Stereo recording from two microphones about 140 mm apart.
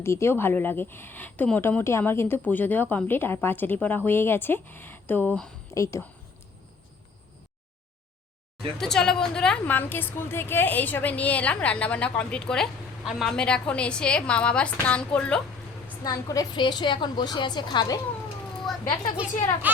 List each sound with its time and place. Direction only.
0.0 s a woman's voice: 20° left (ahead or behind)
5.7 s speech: 20° left (ahead or behind)
8.8 s a woman's voice: 5° left (ahead or behind)
16.3 s a woman's voice: 30° left (ahead or behind)
19.6 s a child's voice: 10° right (ahead or behind)